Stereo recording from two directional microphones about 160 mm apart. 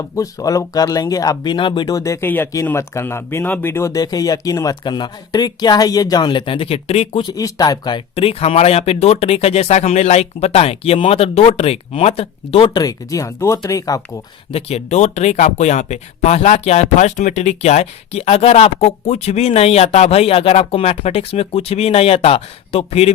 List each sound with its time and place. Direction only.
0.2 s speech: 20° left (ahead or behind); by 7.2 s 40° left (ahead or behind)
7.2 s speech: 25° left (ahead or behind)
14.5 s speech: 40° left (ahead or behind)